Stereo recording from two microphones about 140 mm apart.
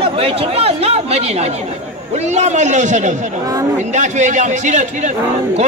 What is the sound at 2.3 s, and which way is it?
A man's voice, 55° right (ahead or behind).